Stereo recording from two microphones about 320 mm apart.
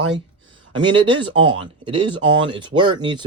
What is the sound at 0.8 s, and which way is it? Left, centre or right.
Speech, centre.